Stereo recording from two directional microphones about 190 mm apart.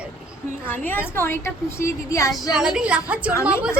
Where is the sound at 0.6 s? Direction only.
10° left (ahead or behind).